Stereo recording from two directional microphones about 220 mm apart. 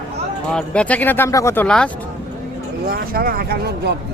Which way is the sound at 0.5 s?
5° left (ahead or behind).